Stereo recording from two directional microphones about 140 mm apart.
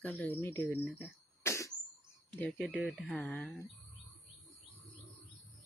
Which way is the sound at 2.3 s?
10° left (ahead or behind).